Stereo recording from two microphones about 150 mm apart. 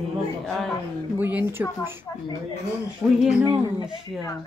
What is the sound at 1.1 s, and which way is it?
Speech, 15° right (ahead or behind).